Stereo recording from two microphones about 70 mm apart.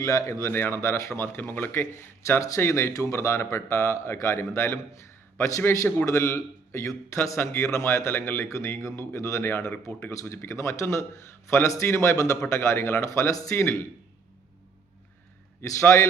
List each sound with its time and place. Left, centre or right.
0.0 s a man's voice: left
0.4 s a man's voice: left
13.1 s a man's voice: left
13.6 s a man's voice: left
15.8 s a man's voice: left